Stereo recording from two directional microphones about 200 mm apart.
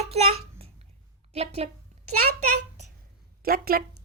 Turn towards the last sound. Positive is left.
turn(degrees=-45)  # may be behind; listen again after turning